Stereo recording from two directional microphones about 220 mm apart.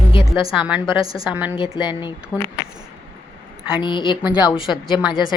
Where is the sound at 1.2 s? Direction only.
5° right (ahead or behind).